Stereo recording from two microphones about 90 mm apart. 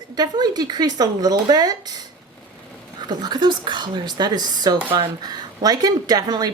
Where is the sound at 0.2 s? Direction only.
50° right (ahead or behind).